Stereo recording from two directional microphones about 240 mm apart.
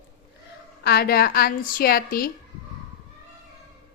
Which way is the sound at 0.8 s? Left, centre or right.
Left.